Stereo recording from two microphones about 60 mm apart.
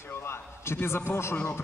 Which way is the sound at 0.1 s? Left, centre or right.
Left.